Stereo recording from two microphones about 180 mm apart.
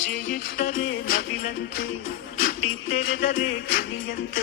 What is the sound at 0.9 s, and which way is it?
Music, 60° left (ahead or behind).